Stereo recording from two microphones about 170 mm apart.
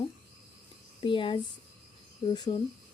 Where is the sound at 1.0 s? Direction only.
30° left (ahead or behind).